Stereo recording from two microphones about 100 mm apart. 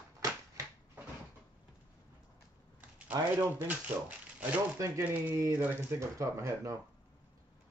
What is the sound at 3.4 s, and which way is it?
Speech, 20° right (ahead or behind).